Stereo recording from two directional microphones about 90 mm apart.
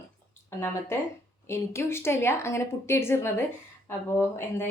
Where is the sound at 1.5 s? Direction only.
30° left (ahead or behind).